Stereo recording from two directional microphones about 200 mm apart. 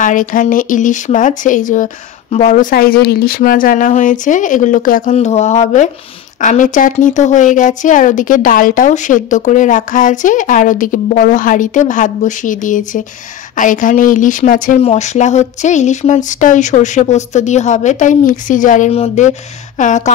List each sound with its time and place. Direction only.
0.0 s speech: 40° left (ahead or behind)